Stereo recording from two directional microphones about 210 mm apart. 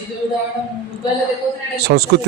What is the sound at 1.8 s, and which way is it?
Speech, 50° right (ahead or behind).